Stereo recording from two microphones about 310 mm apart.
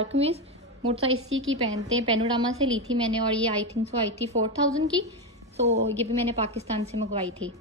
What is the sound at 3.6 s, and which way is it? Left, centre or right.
A woman's voice, right.